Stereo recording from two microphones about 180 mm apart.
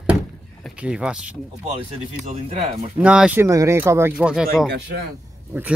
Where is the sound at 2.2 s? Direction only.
40° right (ahead or behind).